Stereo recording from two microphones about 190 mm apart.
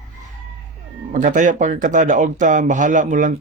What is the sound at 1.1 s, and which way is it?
Speech, 40° right (ahead or behind).